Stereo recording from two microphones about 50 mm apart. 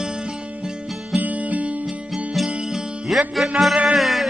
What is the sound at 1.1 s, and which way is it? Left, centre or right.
Music, right.